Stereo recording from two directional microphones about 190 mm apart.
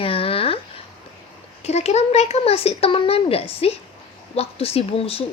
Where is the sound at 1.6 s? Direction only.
35° left (ahead or behind).